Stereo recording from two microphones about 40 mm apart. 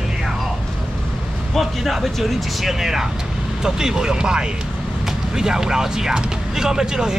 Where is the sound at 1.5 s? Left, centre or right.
Centre.